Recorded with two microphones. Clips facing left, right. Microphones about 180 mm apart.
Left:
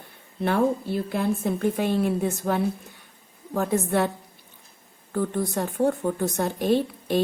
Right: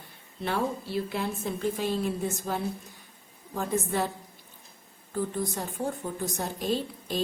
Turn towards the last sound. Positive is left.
turn(degrees=60)  # may be behind; listen again after turning